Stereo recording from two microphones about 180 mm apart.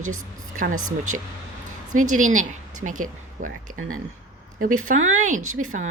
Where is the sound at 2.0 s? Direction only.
45° right (ahead or behind).